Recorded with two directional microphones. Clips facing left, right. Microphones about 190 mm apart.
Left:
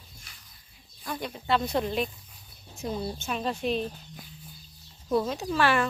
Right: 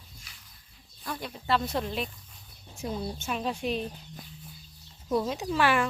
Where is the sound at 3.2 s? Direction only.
10° right (ahead or behind).